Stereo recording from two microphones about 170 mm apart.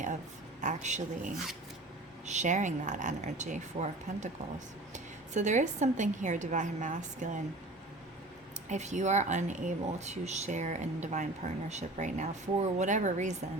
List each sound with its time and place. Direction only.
0.6 s speech: 45° right (ahead or behind)
5.3 s speech: 45° right (ahead or behind)
8.7 s speech: 45° right (ahead or behind)